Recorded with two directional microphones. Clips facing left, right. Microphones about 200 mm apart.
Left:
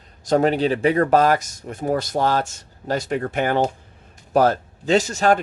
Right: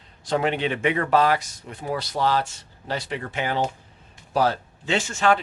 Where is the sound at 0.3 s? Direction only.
40° left (ahead or behind).